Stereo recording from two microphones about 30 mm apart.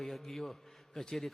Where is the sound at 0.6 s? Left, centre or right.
Centre.